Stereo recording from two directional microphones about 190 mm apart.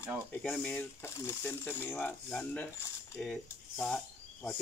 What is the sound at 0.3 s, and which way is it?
Speech, 5° left (ahead or behind).